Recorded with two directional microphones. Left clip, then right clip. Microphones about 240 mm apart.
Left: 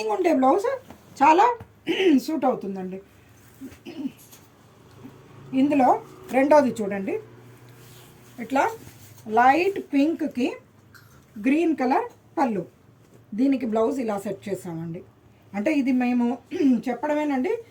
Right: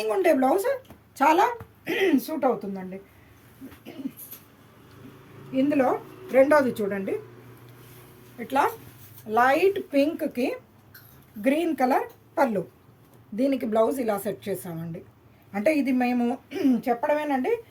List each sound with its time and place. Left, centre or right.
0.1 s speech: right
1.9 s speech: right
2.2 s speech: centre
5.5 s speech: centre
8.4 s speech: centre
9.3 s speech: right
11.4 s speech: right